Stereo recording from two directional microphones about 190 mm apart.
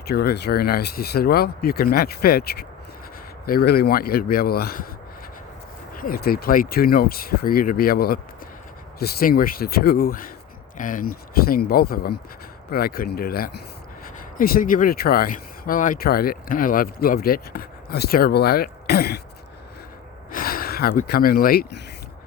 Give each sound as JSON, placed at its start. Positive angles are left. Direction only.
{"t": 0.1, "sound": "speech", "side_deg": 55}
{"t": 5.9, "sound": "speech", "side_deg": 50}
{"t": 20.3, "sound": "a sound", "side_deg": 50}
{"t": 21.1, "sound": "speech", "side_deg": 50}